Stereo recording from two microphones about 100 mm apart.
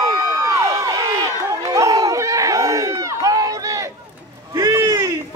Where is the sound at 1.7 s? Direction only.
35° right (ahead or behind).